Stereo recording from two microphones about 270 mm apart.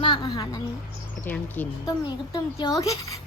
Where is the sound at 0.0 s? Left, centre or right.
Centre.